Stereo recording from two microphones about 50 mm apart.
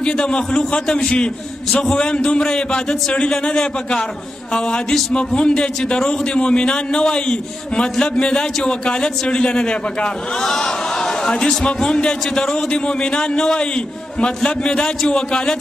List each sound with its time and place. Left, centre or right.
0.0 s a man's voice: centre
10.4 s chatter: centre
11.4 s a man's voice: centre